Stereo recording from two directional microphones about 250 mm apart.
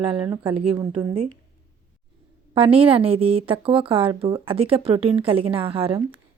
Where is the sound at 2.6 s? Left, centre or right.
Right.